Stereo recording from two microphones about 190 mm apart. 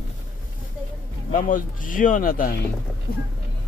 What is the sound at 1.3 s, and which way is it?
Speech, 45° left (ahead or behind).